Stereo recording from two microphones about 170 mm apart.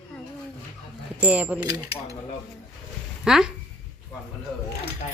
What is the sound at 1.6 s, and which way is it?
Speech, 20° right (ahead or behind).